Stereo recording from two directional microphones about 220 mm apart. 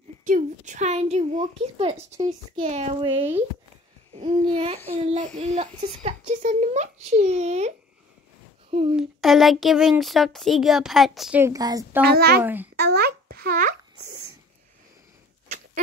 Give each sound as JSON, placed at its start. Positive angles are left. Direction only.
{"t": 0.2, "sound": "a woman's voice", "side_deg": -35}
{"t": 2.6, "sound": "a child's voice", "side_deg": -30}
{"t": 8.9, "sound": "speech", "side_deg": 0}
{"t": 12.0, "sound": "a child's voice", "side_deg": -45}
{"t": 12.4, "sound": "speech", "side_deg": -10}
{"t": 12.7, "sound": "a child's voice", "side_deg": -45}